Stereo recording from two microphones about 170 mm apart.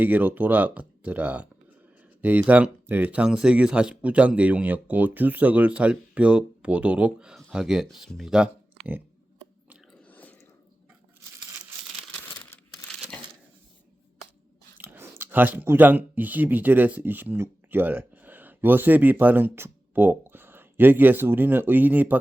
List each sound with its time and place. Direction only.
0.0 s speech: 10° right (ahead or behind)
10.1 s a sound: 10° left (ahead or behind)
14.8 s speech: 15° right (ahead or behind)